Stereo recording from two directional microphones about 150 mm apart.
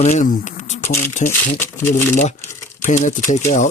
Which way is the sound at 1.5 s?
15° left (ahead or behind).